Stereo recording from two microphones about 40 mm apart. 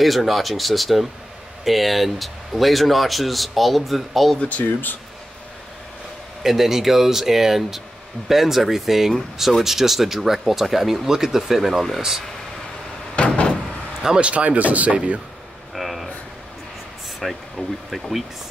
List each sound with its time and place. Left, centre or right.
0.0 s speech: centre
4.4 s speech: left
6.4 s speech: centre
13.1 s door: left
14.0 s speech: right
15.7 s a sound: centre
17.2 s speech: centre